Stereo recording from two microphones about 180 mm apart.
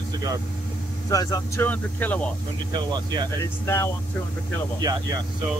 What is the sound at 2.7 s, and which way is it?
Speech, 25° right (ahead or behind).